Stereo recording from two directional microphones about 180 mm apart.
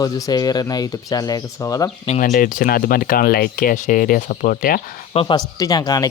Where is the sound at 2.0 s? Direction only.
45° left (ahead or behind).